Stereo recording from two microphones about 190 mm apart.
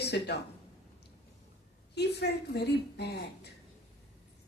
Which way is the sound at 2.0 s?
60° left (ahead or behind).